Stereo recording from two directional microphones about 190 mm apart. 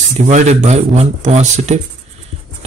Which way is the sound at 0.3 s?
40° right (ahead or behind).